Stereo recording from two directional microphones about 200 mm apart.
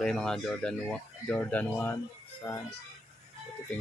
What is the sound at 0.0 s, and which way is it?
Speech, 5° left (ahead or behind).